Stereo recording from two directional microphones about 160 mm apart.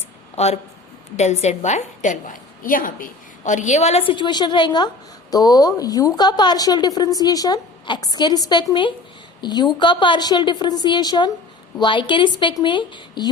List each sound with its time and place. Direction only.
0.3 s a woman's voice: 40° left (ahead or behind)